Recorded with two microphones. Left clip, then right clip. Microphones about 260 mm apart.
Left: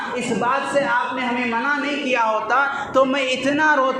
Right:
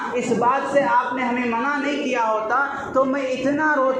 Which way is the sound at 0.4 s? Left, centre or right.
Left.